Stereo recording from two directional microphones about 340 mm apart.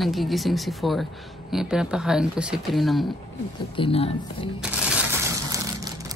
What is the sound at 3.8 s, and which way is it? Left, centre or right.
Speech, centre.